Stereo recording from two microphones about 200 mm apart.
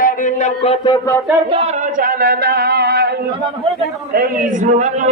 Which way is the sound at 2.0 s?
45° right (ahead or behind).